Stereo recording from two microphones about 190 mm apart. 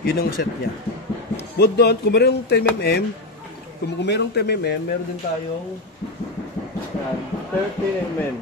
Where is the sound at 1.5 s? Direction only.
60° left (ahead or behind).